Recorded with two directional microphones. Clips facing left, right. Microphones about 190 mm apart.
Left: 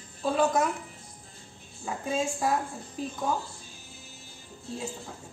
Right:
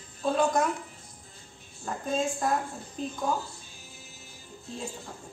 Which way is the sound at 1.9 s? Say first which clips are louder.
Even; 5° left (ahead or behind).